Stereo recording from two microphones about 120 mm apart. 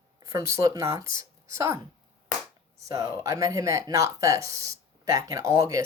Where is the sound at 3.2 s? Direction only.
30° right (ahead or behind).